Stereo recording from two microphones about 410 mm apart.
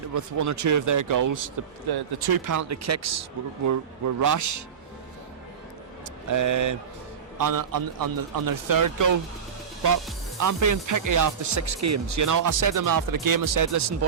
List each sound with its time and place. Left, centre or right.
0.1 s speech: right
1.9 s speech: right
6.2 s speech: right
10.4 s speech: right